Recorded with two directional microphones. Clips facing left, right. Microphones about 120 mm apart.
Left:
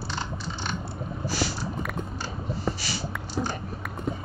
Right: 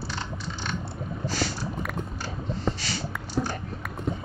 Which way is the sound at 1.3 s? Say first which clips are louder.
Left 1 dB; 10° left (ahead or behind).